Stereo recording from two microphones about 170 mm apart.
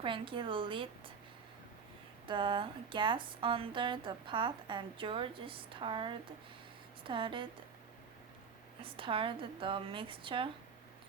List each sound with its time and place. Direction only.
0.0 s speech: 30° right (ahead or behind)
2.2 s speech: 30° right (ahead or behind)
8.8 s a woman's voice: 30° right (ahead or behind)